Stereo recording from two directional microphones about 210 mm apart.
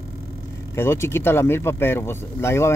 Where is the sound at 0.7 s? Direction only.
10° left (ahead or behind).